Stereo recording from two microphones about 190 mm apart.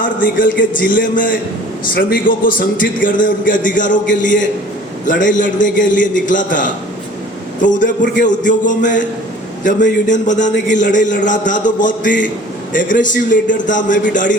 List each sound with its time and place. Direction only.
0.0 s a man's voice: 45° left (ahead or behind)